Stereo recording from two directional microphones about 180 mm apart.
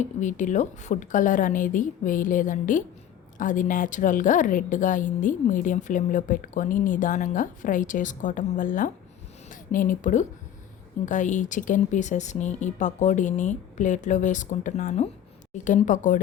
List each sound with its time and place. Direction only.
0.0 s a woman's voice: 45° left (ahead or behind)